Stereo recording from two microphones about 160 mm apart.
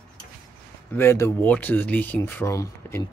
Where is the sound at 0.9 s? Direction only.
15° left (ahead or behind).